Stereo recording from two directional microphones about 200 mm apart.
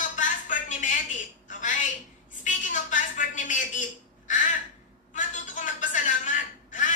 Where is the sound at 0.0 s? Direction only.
40° left (ahead or behind).